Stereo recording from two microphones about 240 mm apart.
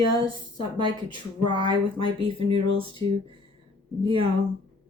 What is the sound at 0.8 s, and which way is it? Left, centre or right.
Speech, centre.